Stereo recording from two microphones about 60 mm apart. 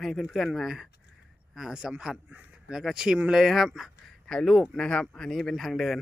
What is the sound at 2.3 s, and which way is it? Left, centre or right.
Speech, right.